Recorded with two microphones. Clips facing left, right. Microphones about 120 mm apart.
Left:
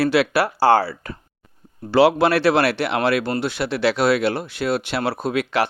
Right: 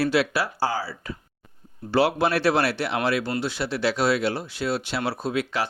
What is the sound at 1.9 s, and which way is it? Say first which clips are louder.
Speech: left 6 dB; 90° left.